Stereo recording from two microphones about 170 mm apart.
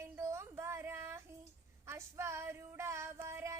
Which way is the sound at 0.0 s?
15° right (ahead or behind).